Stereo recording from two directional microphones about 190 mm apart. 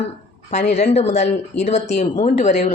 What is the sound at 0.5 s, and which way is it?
Speech, 35° left (ahead or behind).